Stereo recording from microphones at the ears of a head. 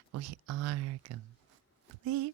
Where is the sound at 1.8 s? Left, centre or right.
Right.